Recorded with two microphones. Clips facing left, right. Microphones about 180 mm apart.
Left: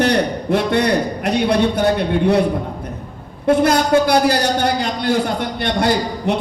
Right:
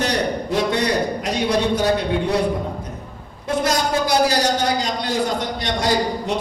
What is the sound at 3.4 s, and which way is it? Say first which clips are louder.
A man's voice: left 6 dB; 60° left (ahead or behind).